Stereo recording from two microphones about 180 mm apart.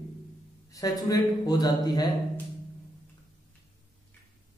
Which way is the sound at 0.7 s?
20° left (ahead or behind).